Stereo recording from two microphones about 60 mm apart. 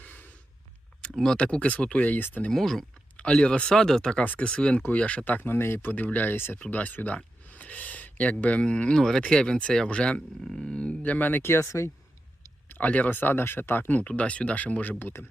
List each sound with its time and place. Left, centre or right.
0.0 s a sound: left
1.0 s speech: centre
1.4 s speech: centre
2.5 s speech: centre
3.2 s speech: centre
4.2 s speech: left
5.5 s speech: left
6.6 s speech: left
9.0 s speech: centre; by 11.9 s left
12.6 s a sound: left
13.1 s speech: left